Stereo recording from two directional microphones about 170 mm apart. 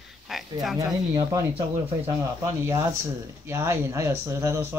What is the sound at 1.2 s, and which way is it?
Speech, 15° right (ahead or behind).